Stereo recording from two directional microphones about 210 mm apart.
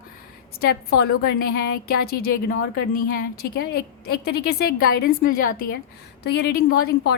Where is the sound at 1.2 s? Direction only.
45° left (ahead or behind).